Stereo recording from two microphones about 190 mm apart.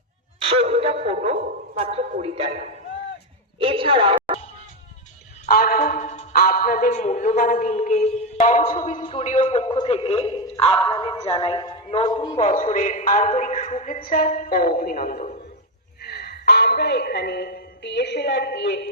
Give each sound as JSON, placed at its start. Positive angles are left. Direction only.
{"t": 0.3, "sound": "a sound", "side_deg": -30}
{"t": 1.8, "sound": "a man's voice", "side_deg": -30}
{"t": 5.5, "sound": "a man's voice", "side_deg": 50}
{"t": 16.0, "sound": "speech", "side_deg": 55}